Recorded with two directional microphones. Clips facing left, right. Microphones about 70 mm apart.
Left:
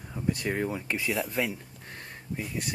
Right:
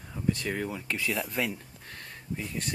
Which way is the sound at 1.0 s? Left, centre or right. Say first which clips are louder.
Left 1 dB; centre.